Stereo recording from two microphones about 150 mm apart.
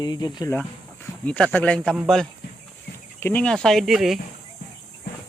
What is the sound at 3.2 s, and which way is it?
Speech, 10° left (ahead or behind).